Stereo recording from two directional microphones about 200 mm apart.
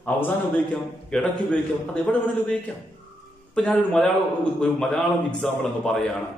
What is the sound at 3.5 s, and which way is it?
A man's voice, 5° left (ahead or behind).